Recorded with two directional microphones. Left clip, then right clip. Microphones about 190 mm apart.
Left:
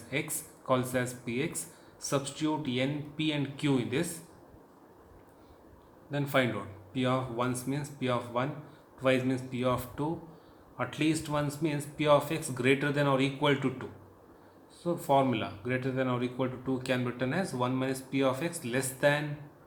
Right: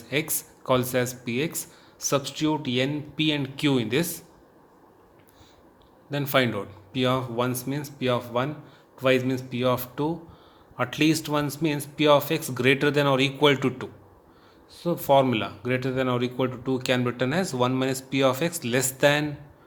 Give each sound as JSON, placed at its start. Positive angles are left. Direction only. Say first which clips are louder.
{"t": 0.1, "sound": "speech", "louder": "right 7 dB", "side_deg": -45}
{"t": 6.1, "sound": "speech", "louder": "right 5 dB", "side_deg": -45}